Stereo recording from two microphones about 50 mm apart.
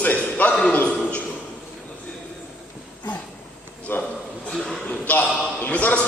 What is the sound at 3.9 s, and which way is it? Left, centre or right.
Speech, left.